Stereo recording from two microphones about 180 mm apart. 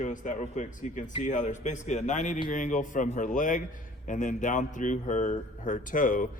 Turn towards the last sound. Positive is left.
turn(degrees=45)  # may be behind; listen again after turning